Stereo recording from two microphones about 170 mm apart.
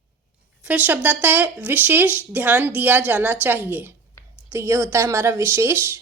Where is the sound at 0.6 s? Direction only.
10° right (ahead or behind).